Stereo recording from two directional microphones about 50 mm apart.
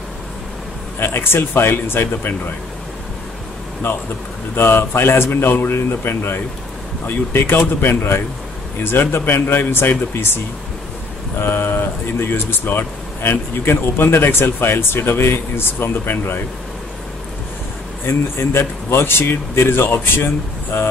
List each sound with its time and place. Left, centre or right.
0.9 s speech: left
4.6 s speech: left
18.0 s speech: left